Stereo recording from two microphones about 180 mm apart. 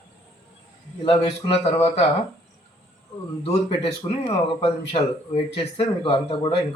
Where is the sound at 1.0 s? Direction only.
30° left (ahead or behind).